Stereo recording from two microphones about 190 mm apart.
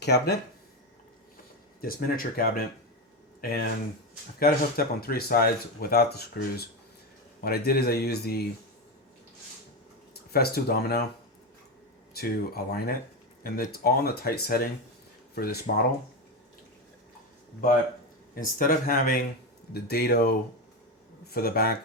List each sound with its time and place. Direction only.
0.0 s a man's voice: 60° left (ahead or behind)
1.8 s a man's voice: 50° left (ahead or behind)
10.3 s a man's voice: 55° left (ahead or behind)
12.1 s speech: 55° left (ahead or behind)
18.3 s a man's voice: 50° left (ahead or behind)